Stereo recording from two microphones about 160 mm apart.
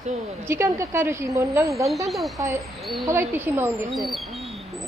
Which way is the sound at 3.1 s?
15° right (ahead or behind).